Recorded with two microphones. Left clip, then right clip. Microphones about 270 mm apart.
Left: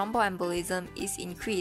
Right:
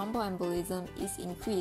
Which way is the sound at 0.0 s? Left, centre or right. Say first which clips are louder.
Left 6 dB; left.